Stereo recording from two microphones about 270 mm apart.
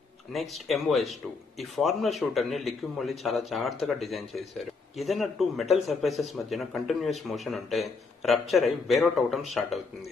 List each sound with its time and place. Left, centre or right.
0.5 s a man's voice: centre